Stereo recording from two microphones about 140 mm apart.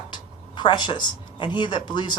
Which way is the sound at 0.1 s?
35° left (ahead or behind).